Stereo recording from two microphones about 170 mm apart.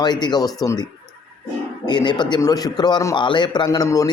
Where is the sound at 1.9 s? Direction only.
25° left (ahead or behind).